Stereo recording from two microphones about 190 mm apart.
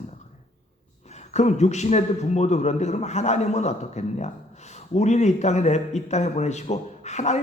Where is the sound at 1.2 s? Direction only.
35° left (ahead or behind).